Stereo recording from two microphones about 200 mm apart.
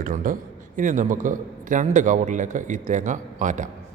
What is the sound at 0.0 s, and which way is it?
A man's voice, 45° right (ahead or behind).